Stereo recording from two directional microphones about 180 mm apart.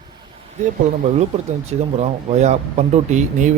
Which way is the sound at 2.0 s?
40° right (ahead or behind).